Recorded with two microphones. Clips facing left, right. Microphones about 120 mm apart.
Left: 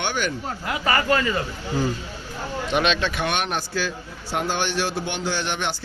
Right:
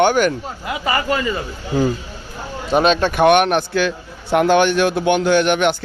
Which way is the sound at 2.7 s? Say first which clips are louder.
Right 8 dB; 40° right (ahead or behind).